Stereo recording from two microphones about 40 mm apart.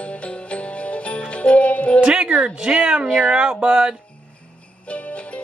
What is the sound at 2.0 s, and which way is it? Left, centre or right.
Speech, right.